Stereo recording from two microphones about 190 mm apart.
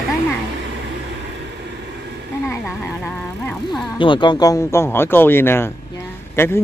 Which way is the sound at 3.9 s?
25° left (ahead or behind).